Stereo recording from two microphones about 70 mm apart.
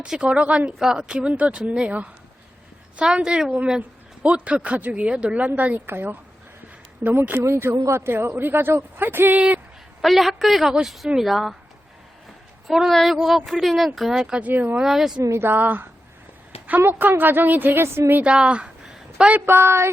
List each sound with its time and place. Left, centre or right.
0.0 s a woman's voice: centre
10.0 s speech: centre
12.6 s speech: centre
12.9 s speech: centre
14.3 s a woman's voice: right
14.8 s speech: centre
15.2 s speech: right
15.4 s a woman's voice: right
17.8 s speech: right
18.1 s speech: centre
19.5 s speech: right